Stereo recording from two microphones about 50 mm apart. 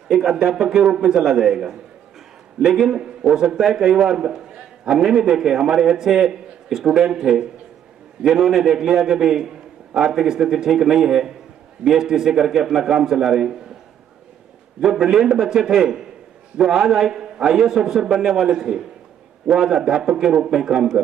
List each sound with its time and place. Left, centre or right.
0.1 s a man's voice: centre
14.8 s a man's voice: centre